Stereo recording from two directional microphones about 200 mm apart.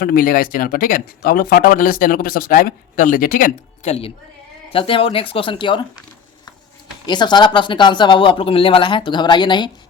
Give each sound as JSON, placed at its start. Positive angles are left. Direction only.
{"t": 0.0, "sound": "speech", "side_deg": 45}
{"t": 4.7, "sound": "speech", "side_deg": 25}
{"t": 7.0, "sound": "speech", "side_deg": 20}